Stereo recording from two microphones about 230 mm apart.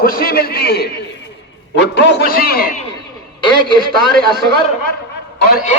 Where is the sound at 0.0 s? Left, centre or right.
Left.